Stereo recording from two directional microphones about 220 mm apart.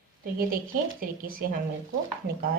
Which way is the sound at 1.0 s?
40° right (ahead or behind).